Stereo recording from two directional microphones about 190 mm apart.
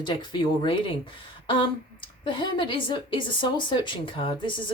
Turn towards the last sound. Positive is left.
turn(degrees=25)  # may be behind; listen again after turning